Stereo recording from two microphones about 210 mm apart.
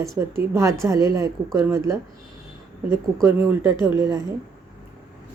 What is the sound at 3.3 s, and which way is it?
Speech, 10° right (ahead or behind).